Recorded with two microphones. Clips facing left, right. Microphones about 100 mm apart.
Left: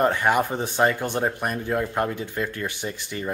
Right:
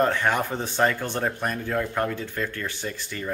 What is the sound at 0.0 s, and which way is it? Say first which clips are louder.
Speech: left 2 dB; 15° left (ahead or behind).